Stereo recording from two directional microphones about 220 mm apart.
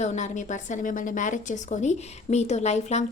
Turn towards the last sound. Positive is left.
turn(degrees=30)  # may be behind; listen again after turning